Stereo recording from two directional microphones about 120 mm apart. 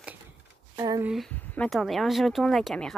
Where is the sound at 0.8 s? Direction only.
30° right (ahead or behind).